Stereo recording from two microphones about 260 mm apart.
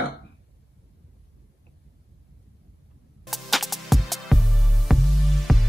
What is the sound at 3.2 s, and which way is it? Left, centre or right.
Music, centre.